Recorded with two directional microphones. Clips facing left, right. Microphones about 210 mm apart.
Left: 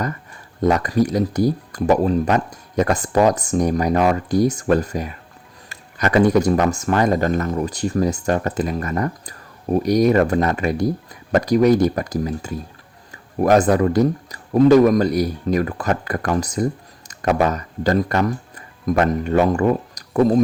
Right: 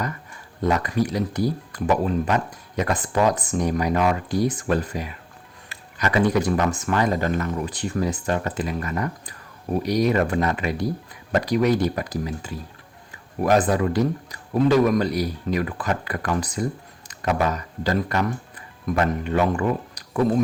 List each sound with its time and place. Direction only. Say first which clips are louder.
0.6 s speech: left 5 dB; 45° left (ahead or behind)